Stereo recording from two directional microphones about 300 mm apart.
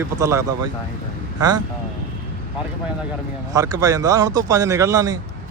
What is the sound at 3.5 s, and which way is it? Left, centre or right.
Speech, centre.